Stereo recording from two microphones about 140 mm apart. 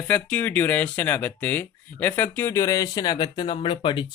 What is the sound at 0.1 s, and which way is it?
Speech, 10° left (ahead or behind).